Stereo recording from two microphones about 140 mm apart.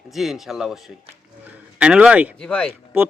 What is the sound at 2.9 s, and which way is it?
Speech, 15° right (ahead or behind).